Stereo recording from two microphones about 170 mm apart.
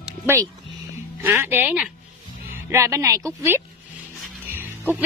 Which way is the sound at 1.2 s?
10° right (ahead or behind).